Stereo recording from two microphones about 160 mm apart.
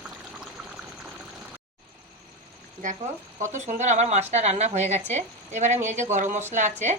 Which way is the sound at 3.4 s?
50° right (ahead or behind).